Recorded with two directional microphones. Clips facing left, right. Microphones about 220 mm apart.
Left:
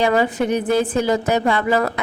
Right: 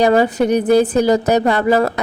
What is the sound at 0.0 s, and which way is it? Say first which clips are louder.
A woman's voice: right 4 dB; 40° right (ahead or behind).